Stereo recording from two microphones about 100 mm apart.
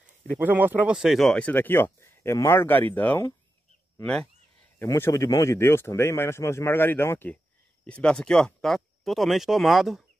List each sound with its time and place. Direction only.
0.4 s speech: 15° right (ahead or behind)
0.9 s speech: centre (ahead or behind)
1.4 s speech: 20° left (ahead or behind)
4.0 s speech: 5° left (ahead or behind)
4.8 s speech: 25° left (ahead or behind)
7.8 s speech: 10° left (ahead or behind)